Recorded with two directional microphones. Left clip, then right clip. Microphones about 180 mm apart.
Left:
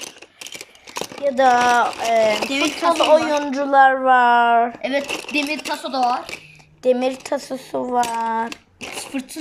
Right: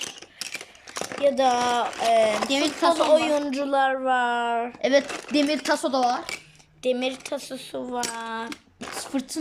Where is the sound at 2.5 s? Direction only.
20° right (ahead or behind).